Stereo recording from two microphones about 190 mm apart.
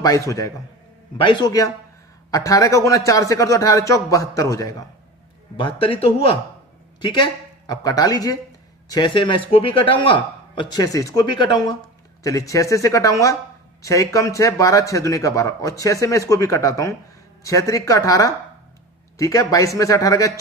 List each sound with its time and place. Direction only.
0.0 s a man's voice: 15° left (ahead or behind)